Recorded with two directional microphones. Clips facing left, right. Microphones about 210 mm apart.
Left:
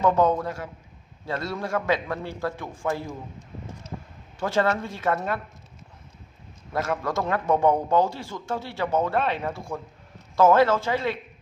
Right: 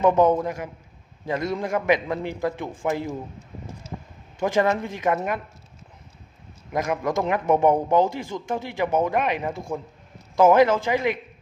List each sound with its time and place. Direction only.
0.0 s a man's voice: 20° right (ahead or behind)
4.4 s a man's voice: 15° right (ahead or behind)
6.7 s a man's voice: 15° right (ahead or behind)